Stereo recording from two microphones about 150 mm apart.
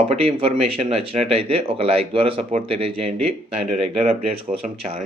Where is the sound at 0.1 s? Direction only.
40° right (ahead or behind).